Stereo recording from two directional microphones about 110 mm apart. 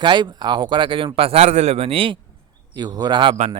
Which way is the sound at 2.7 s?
40° right (ahead or behind).